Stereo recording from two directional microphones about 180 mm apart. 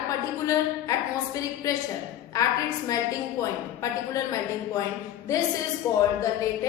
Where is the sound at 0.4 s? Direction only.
20° left (ahead or behind).